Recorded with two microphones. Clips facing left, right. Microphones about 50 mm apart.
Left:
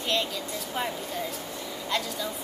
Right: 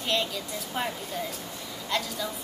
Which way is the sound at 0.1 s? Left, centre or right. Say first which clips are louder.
Even; centre.